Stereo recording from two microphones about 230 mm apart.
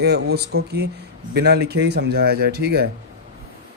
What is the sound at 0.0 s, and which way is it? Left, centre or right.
Speech, right.